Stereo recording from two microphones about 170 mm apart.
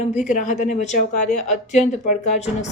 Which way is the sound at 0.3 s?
45° left (ahead or behind).